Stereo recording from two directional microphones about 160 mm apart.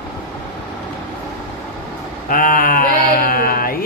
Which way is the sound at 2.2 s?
60° left (ahead or behind).